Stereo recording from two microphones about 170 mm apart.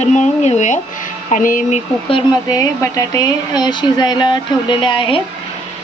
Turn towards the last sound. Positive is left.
turn(degrees=30)  # may be behind; listen again after turning